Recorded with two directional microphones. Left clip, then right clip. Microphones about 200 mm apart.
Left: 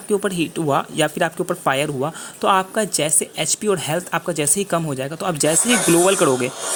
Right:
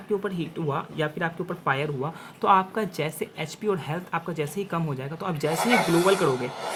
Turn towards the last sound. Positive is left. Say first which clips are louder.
# left 6 dB
turn(degrees=40)  # may be behind; listen again after turning